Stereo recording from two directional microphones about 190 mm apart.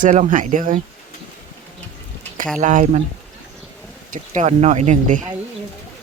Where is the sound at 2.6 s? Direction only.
40° right (ahead or behind).